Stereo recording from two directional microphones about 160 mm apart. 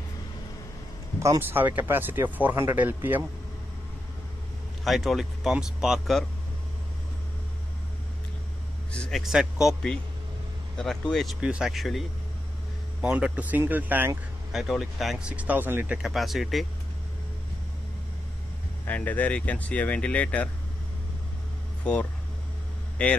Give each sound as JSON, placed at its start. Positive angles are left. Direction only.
{"t": 1.2, "sound": "speech", "side_deg": -15}
{"t": 4.8, "sound": "speech", "side_deg": 0}
{"t": 8.9, "sound": "a man's voice", "side_deg": 5}
{"t": 18.9, "sound": "speech", "side_deg": 10}
{"t": 23.0, "sound": "speech", "side_deg": 10}